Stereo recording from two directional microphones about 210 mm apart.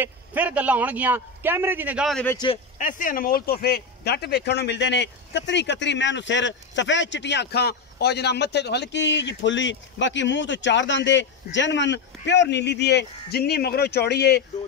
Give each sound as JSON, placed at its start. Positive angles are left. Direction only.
{"t": 0.0, "sound": "a man's voice", "side_deg": -10}
{"t": 2.3, "sound": "a man's voice", "side_deg": 25}
{"t": 2.8, "sound": "speech", "side_deg": 40}